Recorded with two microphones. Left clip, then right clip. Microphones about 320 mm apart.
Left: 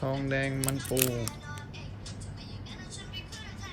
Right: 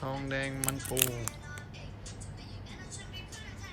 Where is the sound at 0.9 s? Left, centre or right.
Right.